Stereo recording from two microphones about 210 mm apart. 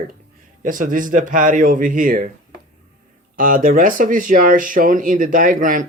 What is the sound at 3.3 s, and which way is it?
Speech, 40° right (ahead or behind).